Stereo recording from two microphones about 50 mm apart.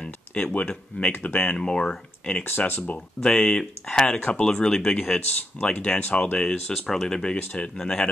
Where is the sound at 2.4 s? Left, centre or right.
Left.